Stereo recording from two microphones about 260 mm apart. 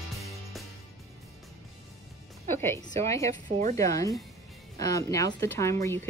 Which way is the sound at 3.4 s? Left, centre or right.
Right.